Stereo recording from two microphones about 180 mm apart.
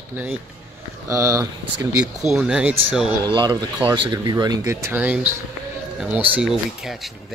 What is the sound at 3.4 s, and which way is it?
Speech, 20° right (ahead or behind).